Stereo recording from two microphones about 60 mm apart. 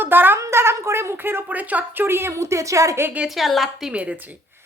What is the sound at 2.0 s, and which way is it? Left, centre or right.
Speech, right.